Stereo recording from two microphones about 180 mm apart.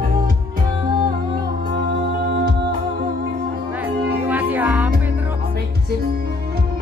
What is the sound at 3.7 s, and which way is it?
Music, 10° right (ahead or behind).